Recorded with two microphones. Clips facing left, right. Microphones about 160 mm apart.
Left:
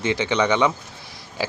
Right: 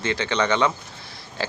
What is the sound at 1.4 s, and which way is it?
Pig, 10° left (ahead or behind).